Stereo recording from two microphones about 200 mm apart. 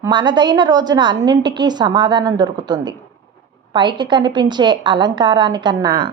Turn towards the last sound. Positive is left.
turn(degrees=-20)  # may be behind; listen again after turning